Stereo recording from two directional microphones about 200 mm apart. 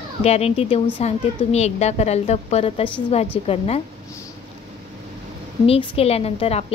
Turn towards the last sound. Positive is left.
turn(degrees=30)  # may be behind; listen again after turning